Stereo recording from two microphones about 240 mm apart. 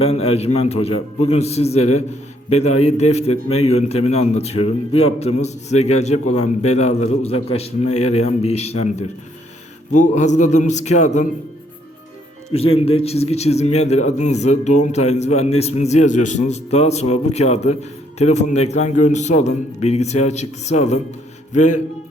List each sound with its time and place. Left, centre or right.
0.0 s a man's voice: left
12.5 s a man's voice: left